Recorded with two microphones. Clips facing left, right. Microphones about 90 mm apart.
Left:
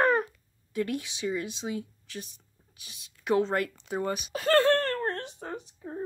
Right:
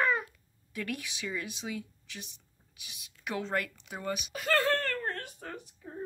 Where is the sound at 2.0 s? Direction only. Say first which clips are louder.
Left 6 dB; 40° left (ahead or behind).